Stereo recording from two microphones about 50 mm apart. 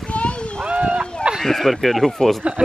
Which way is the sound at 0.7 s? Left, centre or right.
Right.